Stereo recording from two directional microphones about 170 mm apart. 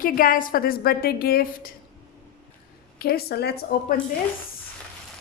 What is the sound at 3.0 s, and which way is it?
Speech, 65° left (ahead or behind).